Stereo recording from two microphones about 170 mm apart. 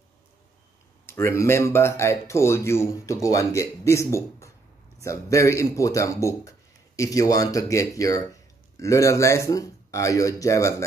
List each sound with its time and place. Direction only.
1.0 s speech: 15° left (ahead or behind)